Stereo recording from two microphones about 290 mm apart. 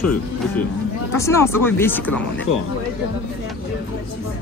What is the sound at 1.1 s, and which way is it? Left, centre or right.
Speech, centre.